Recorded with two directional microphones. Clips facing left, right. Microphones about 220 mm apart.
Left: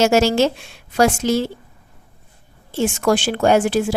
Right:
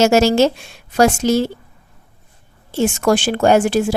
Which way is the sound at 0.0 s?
45° right (ahead or behind).